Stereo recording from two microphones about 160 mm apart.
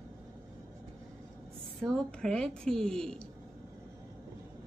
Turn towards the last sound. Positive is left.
turn(degrees=5)  # may be behind; listen again after turning